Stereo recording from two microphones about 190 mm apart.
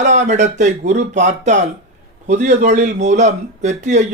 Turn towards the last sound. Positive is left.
turn(degrees=-40)  # may be behind; listen again after turning